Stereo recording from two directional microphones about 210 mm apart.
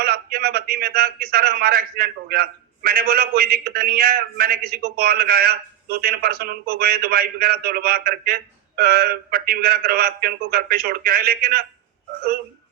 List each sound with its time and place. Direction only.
0.0 s a man's voice: 45° right (ahead or behind)